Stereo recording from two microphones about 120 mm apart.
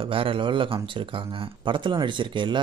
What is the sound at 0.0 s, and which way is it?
Speech, 50° right (ahead or behind).